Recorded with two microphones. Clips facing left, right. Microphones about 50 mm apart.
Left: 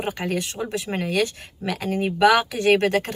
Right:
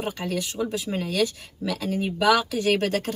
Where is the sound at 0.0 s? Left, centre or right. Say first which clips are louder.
Left 2 dB; left.